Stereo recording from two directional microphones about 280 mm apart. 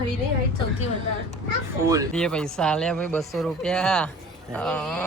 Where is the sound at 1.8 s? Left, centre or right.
Centre.